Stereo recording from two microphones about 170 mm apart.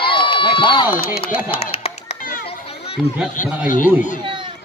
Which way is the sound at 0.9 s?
65° left (ahead or behind).